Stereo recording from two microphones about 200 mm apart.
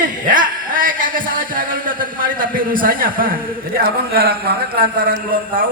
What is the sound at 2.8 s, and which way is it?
A man's voice, 45° right (ahead or behind).